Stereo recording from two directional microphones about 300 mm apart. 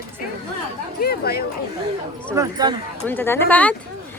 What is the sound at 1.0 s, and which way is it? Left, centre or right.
Speech, left.